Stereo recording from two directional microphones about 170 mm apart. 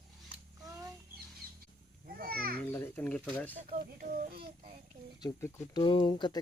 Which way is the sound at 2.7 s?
10° left (ahead or behind).